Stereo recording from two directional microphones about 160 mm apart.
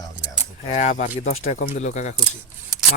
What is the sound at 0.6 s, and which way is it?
Speech, 45° left (ahead or behind).